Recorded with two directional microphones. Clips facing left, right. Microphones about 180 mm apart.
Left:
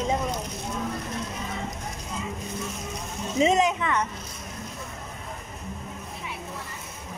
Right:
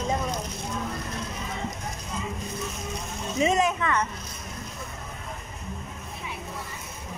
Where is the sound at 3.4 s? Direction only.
20° left (ahead or behind).